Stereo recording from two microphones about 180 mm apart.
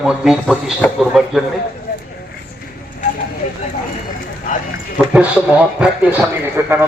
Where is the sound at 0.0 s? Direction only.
5° right (ahead or behind).